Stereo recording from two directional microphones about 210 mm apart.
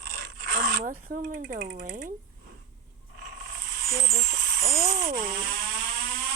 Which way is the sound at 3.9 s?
45° right (ahead or behind).